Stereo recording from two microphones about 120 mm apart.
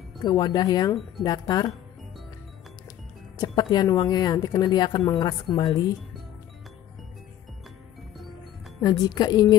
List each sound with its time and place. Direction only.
0.2 s a woman's voice: 35° left (ahead or behind)
3.3 s a woman's voice: 35° left (ahead or behind)
8.8 s a woman's voice: 35° left (ahead or behind)